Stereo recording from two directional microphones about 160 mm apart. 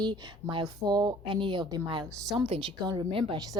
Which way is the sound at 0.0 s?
30° right (ahead or behind).